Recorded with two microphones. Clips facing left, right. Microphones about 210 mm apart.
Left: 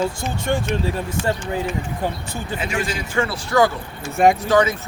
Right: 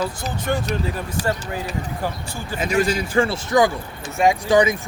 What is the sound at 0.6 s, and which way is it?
Speech, 35° right (ahead or behind).